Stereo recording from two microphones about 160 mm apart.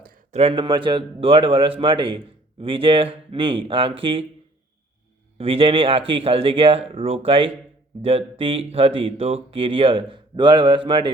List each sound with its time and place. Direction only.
0.0 s a sound: 60° right (ahead or behind)
0.3 s speech: 35° right (ahead or behind)
5.4 s speech: 35° right (ahead or behind)